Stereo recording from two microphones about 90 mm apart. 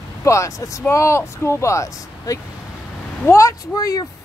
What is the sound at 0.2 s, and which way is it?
Speech, 35° left (ahead or behind).